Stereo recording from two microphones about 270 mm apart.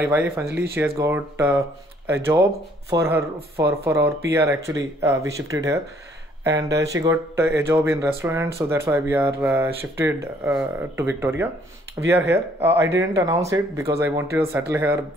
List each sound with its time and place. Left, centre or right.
0.0 s speech: centre